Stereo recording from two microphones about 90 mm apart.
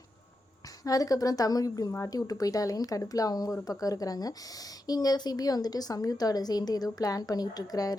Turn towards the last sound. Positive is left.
turn(degrees=45)  # may be behind; listen again after turning